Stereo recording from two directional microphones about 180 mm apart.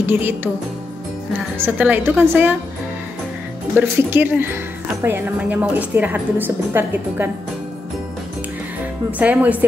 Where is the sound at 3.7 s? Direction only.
15° right (ahead or behind).